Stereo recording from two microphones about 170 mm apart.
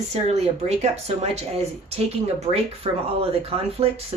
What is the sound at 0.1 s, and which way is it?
Speech, 40° right (ahead or behind).